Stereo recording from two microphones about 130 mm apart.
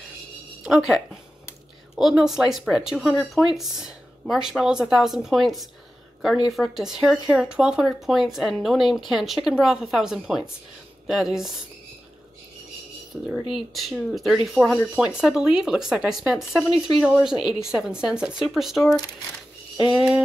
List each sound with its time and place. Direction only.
0.7 s speech: 5° right (ahead or behind)
13.1 s speech: 10° right (ahead or behind)